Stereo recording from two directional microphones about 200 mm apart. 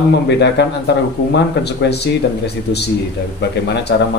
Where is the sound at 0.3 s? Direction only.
60° left (ahead or behind).